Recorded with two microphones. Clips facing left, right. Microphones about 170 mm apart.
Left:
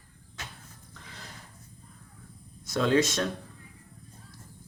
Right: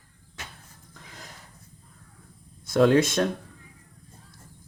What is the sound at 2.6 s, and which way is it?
Speech, 55° right (ahead or behind).